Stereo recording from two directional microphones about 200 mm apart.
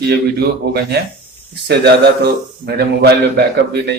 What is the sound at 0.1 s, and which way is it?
A man's voice, 55° right (ahead or behind).